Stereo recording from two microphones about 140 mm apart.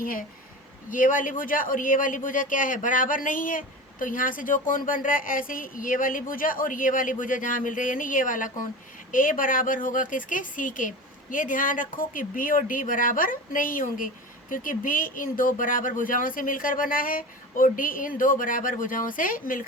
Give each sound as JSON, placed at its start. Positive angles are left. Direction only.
{"t": 0.0, "sound": "speech", "side_deg": 85}
{"t": 0.9, "sound": "speech", "side_deg": 70}